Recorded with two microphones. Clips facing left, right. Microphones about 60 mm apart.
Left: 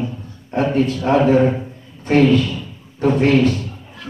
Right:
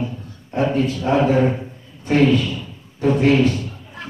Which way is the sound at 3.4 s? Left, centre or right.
Left.